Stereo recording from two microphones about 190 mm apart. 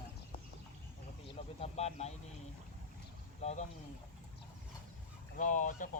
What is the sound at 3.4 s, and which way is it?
Speech, 35° left (ahead or behind).